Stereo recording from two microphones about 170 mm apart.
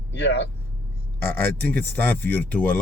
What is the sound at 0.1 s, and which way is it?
Speech, 85° left.